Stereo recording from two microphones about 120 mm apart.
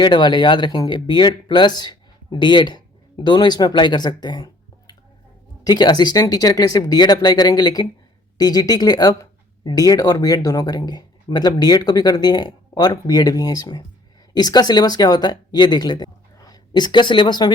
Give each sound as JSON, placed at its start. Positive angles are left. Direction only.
{"t": 0.0, "sound": "speech", "side_deg": 40}